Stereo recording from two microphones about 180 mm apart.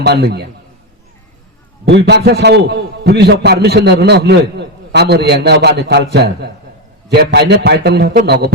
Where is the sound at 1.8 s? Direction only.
70° right (ahead or behind).